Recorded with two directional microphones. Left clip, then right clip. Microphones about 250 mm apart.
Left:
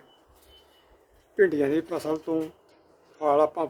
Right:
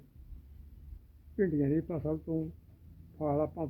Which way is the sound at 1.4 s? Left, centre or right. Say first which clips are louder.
Left 9 dB; left.